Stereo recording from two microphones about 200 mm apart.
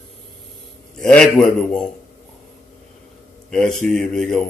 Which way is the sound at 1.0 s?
5° left (ahead or behind).